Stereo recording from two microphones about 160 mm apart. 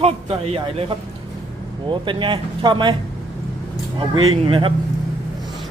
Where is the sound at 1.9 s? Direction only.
30° right (ahead or behind).